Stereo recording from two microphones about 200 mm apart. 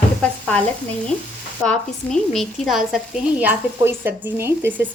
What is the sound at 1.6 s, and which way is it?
Speech, centre (ahead or behind).